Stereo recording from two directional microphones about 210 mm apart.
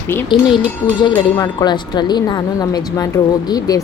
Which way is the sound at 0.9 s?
20° left (ahead or behind).